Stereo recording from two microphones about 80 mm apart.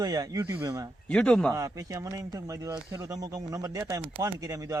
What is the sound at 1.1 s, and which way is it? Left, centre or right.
Speech, centre.